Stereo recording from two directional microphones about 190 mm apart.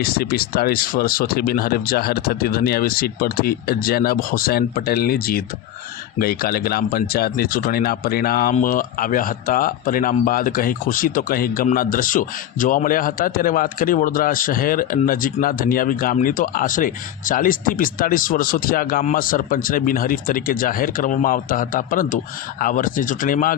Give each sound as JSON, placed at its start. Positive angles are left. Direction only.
{"t": 0.0, "sound": "speech", "side_deg": 50}